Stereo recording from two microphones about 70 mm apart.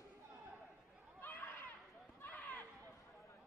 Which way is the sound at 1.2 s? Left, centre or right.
Left.